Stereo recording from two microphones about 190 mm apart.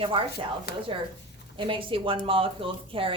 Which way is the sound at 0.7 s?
55° left (ahead or behind).